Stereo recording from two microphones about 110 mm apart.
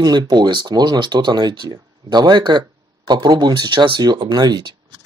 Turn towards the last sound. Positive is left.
turn(degrees=-40)  # may be behind; listen again after turning